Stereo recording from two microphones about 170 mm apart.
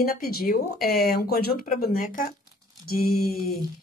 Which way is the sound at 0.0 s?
60° left (ahead or behind).